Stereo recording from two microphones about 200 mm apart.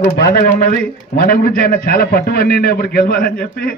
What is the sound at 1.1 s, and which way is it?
A man's voice, 50° left (ahead or behind).